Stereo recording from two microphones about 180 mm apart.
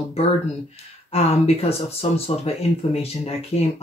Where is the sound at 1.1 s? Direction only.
35° left (ahead or behind).